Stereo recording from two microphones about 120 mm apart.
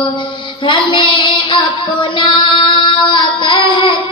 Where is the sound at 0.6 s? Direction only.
45° left (ahead or behind).